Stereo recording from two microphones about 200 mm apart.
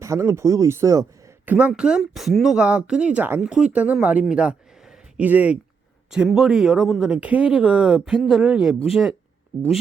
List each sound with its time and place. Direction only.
0.0 s speech: 15° right (ahead or behind)